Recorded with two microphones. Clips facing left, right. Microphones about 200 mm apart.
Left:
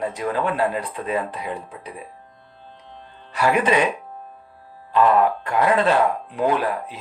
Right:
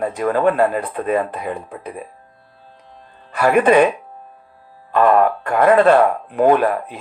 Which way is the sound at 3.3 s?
50° right (ahead or behind).